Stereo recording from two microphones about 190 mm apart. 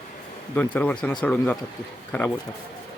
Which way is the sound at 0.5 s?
10° left (ahead or behind).